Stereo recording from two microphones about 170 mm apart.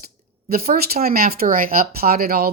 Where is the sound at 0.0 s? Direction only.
60° right (ahead or behind).